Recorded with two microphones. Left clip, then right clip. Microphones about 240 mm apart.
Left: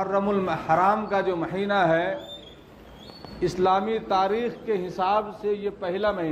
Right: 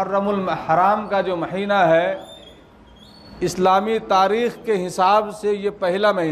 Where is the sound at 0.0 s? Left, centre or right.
Right.